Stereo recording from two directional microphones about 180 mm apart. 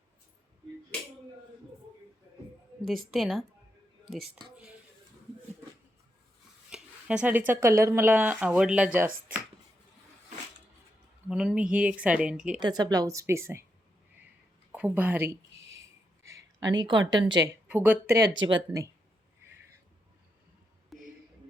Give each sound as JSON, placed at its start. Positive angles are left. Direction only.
{"t": 3.1, "sound": "speech", "side_deg": 0}
{"t": 6.7, "sound": "speech", "side_deg": -5}
{"t": 11.3, "sound": "speech", "side_deg": -5}
{"t": 12.5, "sound": "speech", "side_deg": -25}
{"t": 14.7, "sound": "a woman's voice", "side_deg": -10}
{"t": 16.2, "sound": "a sound", "side_deg": -20}
{"t": 17.1, "sound": "speech", "side_deg": -25}
{"t": 17.4, "sound": "speech", "side_deg": -10}
{"t": 18.4, "sound": "speech", "side_deg": -20}
{"t": 20.9, "sound": "a sound", "side_deg": 0}